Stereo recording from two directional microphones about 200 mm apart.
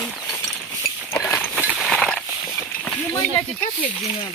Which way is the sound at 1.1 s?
15° left (ahead or behind).